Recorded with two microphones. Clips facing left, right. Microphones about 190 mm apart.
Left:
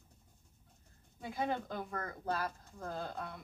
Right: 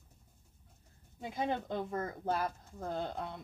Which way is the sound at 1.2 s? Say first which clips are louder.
Right 1 dB; 20° right (ahead or behind).